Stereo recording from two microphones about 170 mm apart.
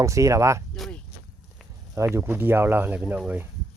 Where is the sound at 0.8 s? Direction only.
Centre (ahead or behind).